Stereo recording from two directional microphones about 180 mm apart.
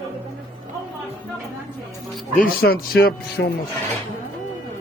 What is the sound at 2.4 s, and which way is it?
Speech, 55° left (ahead or behind).